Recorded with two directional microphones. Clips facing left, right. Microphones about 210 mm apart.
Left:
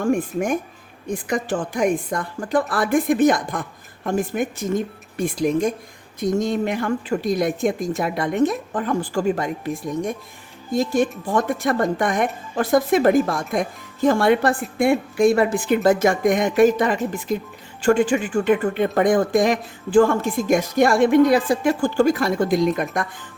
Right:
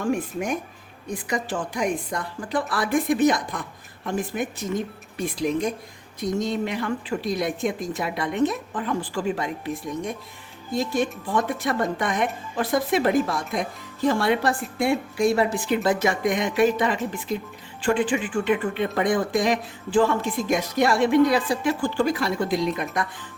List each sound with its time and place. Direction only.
0.0 s speech: 50° left (ahead or behind)